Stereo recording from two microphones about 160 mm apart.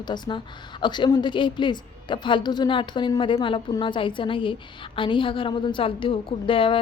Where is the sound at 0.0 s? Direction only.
30° left (ahead or behind).